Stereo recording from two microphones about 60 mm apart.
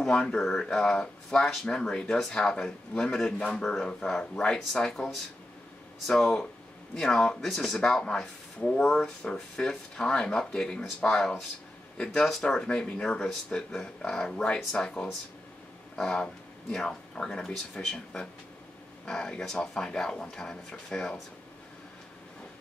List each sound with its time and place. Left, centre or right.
0.0 s speech: centre